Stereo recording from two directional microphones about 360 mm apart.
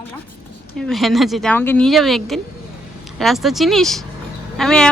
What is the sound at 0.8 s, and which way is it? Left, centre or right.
Speech, centre.